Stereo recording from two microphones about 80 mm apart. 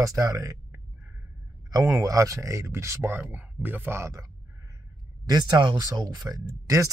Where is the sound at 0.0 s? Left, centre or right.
Right.